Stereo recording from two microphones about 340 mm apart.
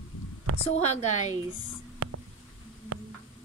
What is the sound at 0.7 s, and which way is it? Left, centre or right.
Speech, centre.